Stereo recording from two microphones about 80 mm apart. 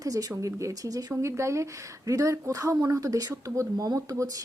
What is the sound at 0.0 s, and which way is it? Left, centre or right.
A woman's voice, right.